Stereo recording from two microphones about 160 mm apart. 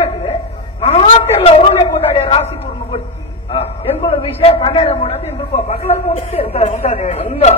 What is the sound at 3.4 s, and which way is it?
A man's voice, 35° left (ahead or behind).